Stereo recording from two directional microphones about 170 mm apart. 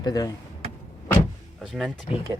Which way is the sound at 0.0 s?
20° left (ahead or behind).